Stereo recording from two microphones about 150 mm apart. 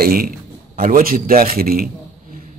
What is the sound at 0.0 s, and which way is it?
Speech, 75° right (ahead or behind).